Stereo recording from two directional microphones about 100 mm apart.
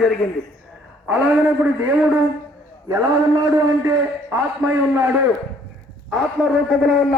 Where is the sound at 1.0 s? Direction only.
15° right (ahead or behind).